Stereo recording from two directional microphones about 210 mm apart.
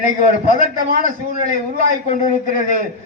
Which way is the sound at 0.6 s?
40° right (ahead or behind).